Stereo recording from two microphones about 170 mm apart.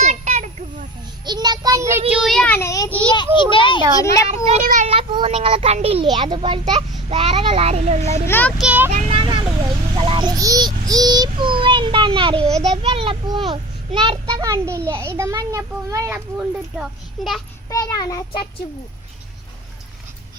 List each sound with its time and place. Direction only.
0.0 s children playing: 45° right (ahead or behind)
1.2 s a child's voice: 25° right (ahead or behind); by 2.9 s 20° left (ahead or behind)
3.3 s child singing: 30° left (ahead or behind)
4.0 s child singing: 20° left (ahead or behind)
4.6 s a child's voice: 50° right (ahead or behind)
4.9 s a child's voice: 35° right (ahead or behind)
8.3 s a child's voice: 10° left (ahead or behind)
8.5 s a child's voice: 5° right (ahead or behind)
9.0 s vehicle: 30° right (ahead or behind)
10.0 s child singing: 30° right (ahead or behind)
12.6 s a child's voice: 35° right (ahead or behind); by 17.4 s centre (ahead or behind)
17.7 s child singing: 20° left (ahead or behind)